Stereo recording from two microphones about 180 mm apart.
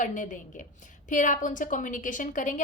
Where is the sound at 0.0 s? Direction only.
45° left (ahead or behind).